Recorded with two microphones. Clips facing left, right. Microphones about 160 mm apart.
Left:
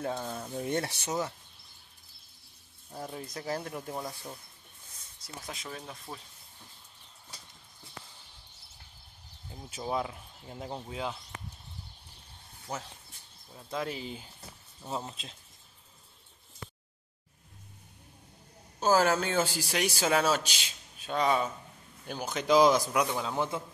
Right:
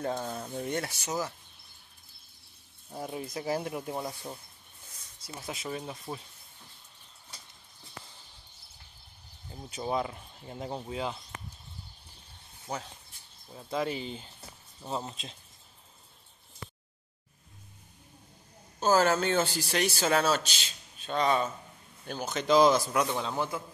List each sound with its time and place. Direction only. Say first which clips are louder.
0.2 s speech: right 1 dB; 5° right (ahead or behind)
0.7 s speech: left 3 dB; 25° left (ahead or behind)
2.9 s speech: right 3 dB; 10° right (ahead or behind)
5.5 s speech: right 6 dB; 5° right (ahead or behind)
9.5 s speech: right 2 dB; centre (ahead or behind)
13.6 s speech: right 3 dB; centre (ahead or behind)
18.8 s speech: right 1 dB; 10° left (ahead or behind)
23.3 s speech: left 1 dB; 20° left (ahead or behind)